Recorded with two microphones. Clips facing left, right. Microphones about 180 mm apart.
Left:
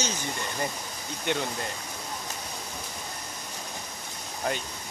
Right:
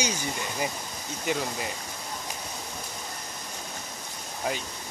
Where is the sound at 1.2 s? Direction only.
Centre (ahead or behind).